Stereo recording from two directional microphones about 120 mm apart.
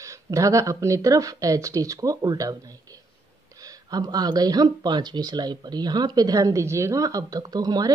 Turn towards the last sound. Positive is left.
turn(degrees=-30)  # may be behind; listen again after turning